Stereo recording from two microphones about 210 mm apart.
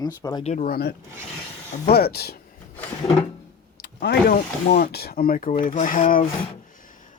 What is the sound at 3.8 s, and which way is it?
Vehicle, 50° left (ahead or behind).